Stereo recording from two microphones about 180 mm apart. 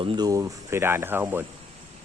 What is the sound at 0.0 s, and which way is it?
Speech, 25° right (ahead or behind).